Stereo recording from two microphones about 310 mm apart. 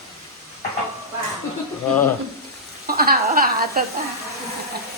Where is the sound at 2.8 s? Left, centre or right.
Right.